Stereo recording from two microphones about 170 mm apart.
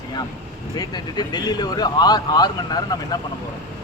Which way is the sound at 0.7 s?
25° left (ahead or behind).